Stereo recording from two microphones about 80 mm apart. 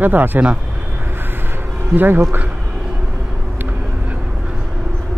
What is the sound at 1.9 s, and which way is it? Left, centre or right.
Speech, right.